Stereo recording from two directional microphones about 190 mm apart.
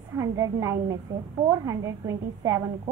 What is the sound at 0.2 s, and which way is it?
A woman's voice, 15° right (ahead or behind).